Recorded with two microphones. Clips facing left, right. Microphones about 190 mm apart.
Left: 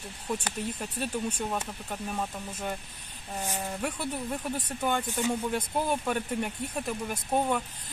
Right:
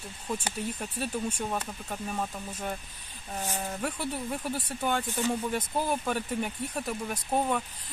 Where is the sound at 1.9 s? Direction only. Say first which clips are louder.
Even; centre (ahead or behind).